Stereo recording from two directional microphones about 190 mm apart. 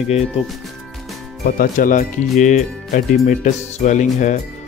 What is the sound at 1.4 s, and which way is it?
Speech, 50° left (ahead or behind).